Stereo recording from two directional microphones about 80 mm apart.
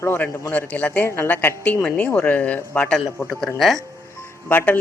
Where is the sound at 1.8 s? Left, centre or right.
Centre.